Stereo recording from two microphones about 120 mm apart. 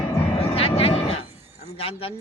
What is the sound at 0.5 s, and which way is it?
Vehicle, 55° left (ahead or behind).